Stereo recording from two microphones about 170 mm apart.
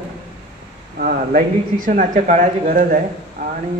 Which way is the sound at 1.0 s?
55° right (ahead or behind).